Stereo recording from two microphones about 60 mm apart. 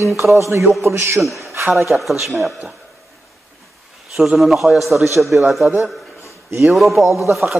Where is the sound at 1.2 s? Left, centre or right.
Centre.